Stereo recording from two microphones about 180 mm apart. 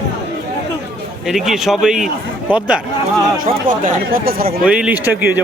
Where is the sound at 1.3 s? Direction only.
Centre (ahead or behind).